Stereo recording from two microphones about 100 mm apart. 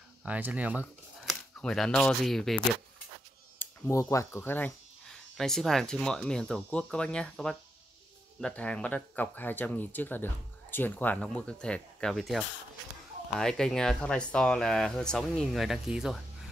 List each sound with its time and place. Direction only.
0.2 s speech: 15° right (ahead or behind)
1.2 s speech: 5° left (ahead or behind)
3.5 s speech: 25° left (ahead or behind)
5.0 s speech: 5° left (ahead or behind)